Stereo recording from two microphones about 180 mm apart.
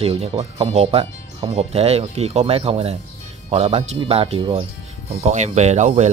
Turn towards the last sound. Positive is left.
turn(degrees=-40)  # may be behind; listen again after turning